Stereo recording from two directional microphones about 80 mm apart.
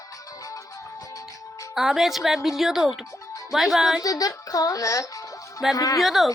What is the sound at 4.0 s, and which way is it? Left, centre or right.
Speech, left.